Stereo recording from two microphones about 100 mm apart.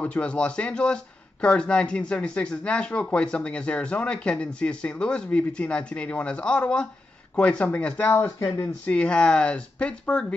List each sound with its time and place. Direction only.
0.0 s speech: 10° left (ahead or behind)
8.8 s speech: 10° left (ahead or behind)